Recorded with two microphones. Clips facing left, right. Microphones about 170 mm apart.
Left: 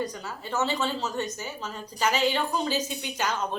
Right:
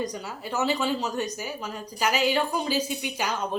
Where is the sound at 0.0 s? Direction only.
15° right (ahead or behind).